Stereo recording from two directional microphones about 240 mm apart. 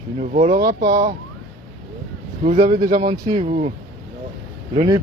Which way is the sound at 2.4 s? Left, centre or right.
Right.